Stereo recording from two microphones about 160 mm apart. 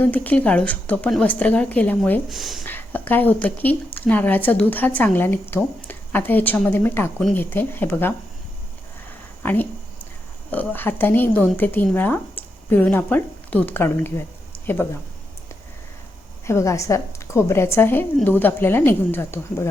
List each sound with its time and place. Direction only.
0.0 s speech: 10° left (ahead or behind)
2.3 s speech: centre (ahead or behind)
2.6 s speech: 10° left (ahead or behind)
9.4 s speech: 10° left (ahead or behind)
16.5 s speech: 20° left (ahead or behind)